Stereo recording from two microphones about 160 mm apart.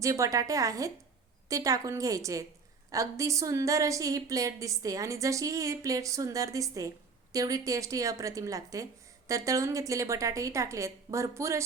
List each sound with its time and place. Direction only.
0.0 s speech: 20° right (ahead or behind)